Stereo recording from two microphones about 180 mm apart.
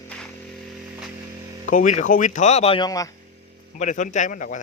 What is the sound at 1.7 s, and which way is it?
Speech, 45° left (ahead or behind).